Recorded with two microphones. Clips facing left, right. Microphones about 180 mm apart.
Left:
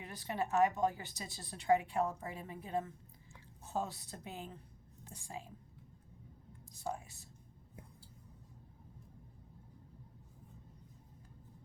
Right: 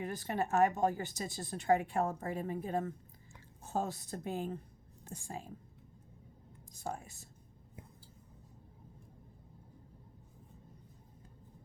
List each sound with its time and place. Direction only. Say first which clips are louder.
0.0 s a woman's voice: right 4 dB; 50° right (ahead or behind)
6.7 s a woman's voice: even; 50° right (ahead or behind)